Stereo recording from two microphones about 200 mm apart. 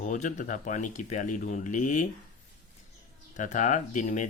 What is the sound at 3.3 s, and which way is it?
Speech, 40° left (ahead or behind).